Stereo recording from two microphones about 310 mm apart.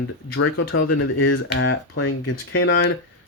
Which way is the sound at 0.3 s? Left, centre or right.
Left.